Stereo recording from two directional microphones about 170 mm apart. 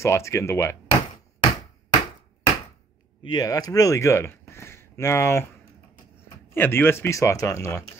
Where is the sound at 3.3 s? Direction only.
20° left (ahead or behind).